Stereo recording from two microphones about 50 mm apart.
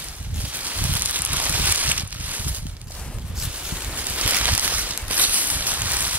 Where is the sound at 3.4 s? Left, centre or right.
Right.